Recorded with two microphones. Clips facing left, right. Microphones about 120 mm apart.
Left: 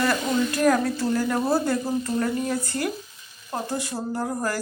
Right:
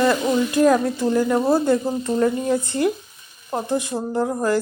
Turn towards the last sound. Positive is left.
turn(degrees=-15)  # may be behind; listen again after turning